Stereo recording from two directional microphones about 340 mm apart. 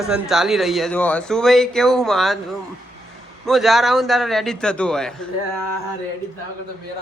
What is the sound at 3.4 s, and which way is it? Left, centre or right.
Speech, centre.